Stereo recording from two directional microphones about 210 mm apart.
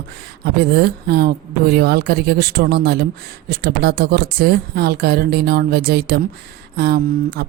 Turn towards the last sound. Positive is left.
turn(degrees=-50)  # may be behind; listen again after turning